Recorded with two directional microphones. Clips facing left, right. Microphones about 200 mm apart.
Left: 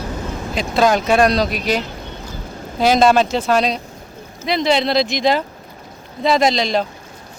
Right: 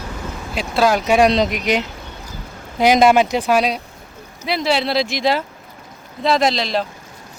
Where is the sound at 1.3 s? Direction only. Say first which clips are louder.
Right 1 dB; 20° right (ahead or behind).